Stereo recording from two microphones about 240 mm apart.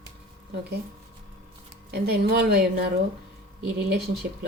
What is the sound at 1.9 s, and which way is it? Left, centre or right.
Speech, right.